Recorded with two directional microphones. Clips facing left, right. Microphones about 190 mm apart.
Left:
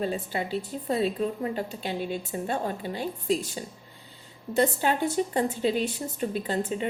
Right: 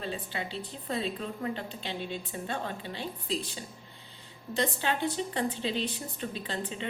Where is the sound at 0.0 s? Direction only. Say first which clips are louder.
Left 7 dB; 40° left (ahead or behind).